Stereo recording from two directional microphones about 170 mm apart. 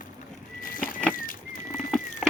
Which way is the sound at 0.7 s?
55° left (ahead or behind).